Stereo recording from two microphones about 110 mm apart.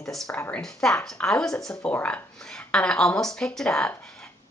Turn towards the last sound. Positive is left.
turn(degrees=5)  # may be behind; listen again after turning